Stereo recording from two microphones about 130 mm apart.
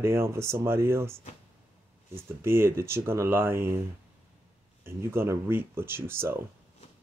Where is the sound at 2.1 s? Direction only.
20° right (ahead or behind).